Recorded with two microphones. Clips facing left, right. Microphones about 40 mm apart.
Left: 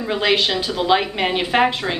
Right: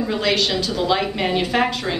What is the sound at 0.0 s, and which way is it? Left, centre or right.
A woman's voice, left.